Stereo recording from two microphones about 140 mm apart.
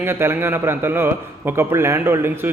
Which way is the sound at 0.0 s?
15° right (ahead or behind).